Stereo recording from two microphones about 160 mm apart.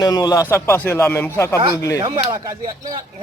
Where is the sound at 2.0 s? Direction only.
30° right (ahead or behind).